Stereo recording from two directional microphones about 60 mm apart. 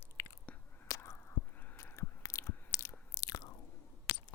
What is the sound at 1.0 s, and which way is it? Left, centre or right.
Squish, left.